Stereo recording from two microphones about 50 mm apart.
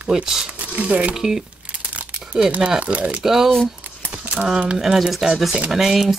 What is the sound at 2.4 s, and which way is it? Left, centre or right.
Speech, right.